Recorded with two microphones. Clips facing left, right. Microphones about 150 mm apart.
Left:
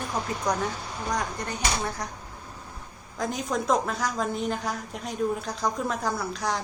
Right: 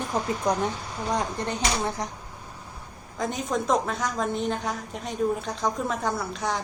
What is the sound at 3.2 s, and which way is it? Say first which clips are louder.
A woman's voice: right 1 dB; centre (ahead or behind).